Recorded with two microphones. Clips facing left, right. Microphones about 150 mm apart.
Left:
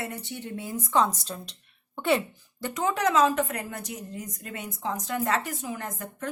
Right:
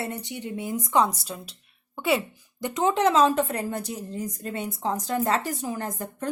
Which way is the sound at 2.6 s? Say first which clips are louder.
Right 4 dB; 20° right (ahead or behind).